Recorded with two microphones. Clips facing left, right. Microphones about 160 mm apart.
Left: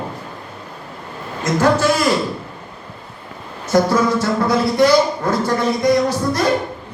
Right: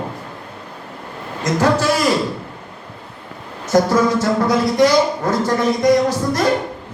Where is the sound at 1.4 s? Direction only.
35° right (ahead or behind).